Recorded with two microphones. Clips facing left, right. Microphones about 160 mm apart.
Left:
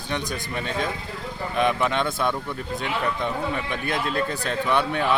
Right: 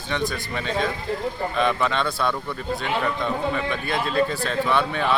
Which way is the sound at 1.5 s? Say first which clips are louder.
Left 2 dB; 15° left (ahead or behind).